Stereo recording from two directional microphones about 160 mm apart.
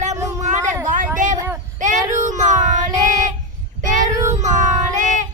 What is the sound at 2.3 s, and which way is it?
Child singing, 50° right (ahead or behind).